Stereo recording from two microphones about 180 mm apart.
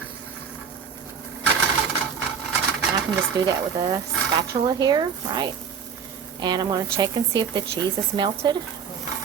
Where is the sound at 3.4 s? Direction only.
20° right (ahead or behind).